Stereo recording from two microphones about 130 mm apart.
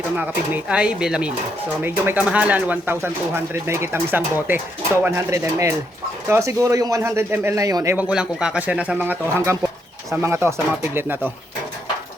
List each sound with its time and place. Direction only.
0.2 s speech: 10° right (ahead or behind); by 7.9 s 25° right (ahead or behind)
7.9 s speech: 10° right (ahead or behind)